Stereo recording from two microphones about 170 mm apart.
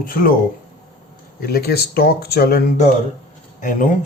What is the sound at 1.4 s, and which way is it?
Speech, 65° left (ahead or behind).